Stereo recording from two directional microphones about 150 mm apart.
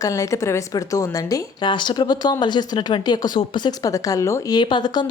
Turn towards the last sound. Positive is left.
turn(degrees=30)  # may be behind; listen again after turning